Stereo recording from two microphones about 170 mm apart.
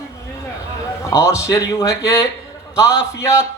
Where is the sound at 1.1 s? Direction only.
15° left (ahead or behind).